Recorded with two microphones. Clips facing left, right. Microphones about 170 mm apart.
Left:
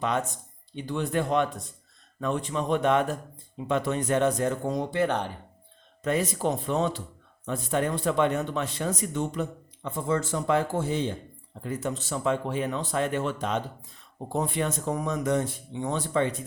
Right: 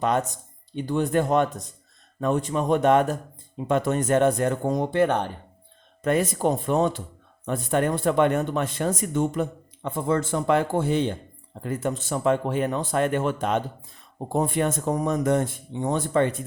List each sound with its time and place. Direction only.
0.0 s speech: 45° right (ahead or behind)